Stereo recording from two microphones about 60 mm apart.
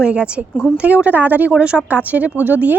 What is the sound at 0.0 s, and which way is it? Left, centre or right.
A child's voice, centre.